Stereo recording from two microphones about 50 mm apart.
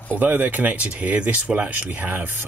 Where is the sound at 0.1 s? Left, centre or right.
Right.